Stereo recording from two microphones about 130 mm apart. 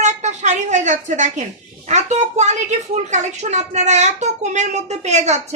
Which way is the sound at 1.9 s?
60° right (ahead or behind).